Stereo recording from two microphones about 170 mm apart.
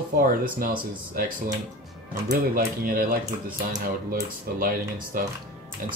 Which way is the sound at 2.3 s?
55° right (ahead or behind).